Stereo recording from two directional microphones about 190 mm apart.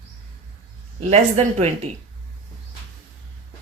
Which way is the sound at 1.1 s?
35° right (ahead or behind).